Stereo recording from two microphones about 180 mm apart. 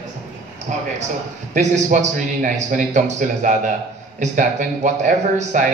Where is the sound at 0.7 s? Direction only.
45° right (ahead or behind).